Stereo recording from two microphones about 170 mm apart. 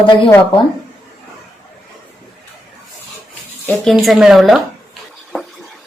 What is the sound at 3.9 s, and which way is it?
Speech, centre (ahead or behind).